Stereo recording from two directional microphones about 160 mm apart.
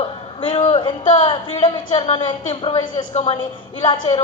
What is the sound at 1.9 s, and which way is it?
A woman's voice, 35° left (ahead or behind).